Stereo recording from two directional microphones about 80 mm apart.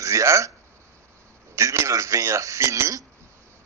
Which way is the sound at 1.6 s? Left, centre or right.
Right.